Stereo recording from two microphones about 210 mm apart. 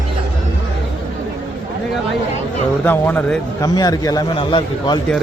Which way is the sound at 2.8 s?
10° left (ahead or behind).